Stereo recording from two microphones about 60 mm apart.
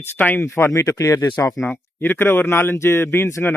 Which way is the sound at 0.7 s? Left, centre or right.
Left.